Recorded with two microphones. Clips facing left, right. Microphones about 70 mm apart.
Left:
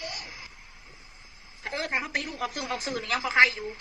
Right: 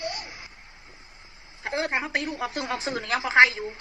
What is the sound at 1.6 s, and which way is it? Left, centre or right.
A woman's voice, right.